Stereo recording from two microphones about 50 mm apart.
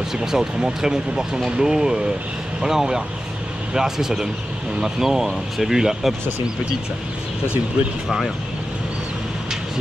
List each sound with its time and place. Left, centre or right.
0.2 s speech: centre